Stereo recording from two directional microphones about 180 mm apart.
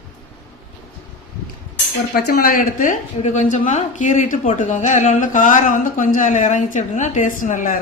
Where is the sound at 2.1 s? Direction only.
55° left (ahead or behind).